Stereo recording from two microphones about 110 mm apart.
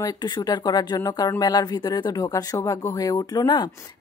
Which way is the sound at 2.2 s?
30° left (ahead or behind).